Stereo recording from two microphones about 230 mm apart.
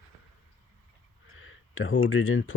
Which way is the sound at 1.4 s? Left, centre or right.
Left.